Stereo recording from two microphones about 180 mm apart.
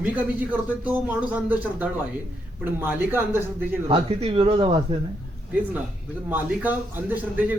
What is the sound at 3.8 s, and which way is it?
Speech, 35° right (ahead or behind).